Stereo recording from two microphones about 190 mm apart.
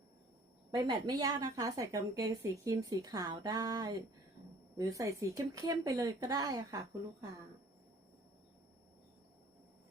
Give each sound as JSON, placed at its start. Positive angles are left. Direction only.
{"t": 0.7, "sound": "a woman's voice", "side_deg": -20}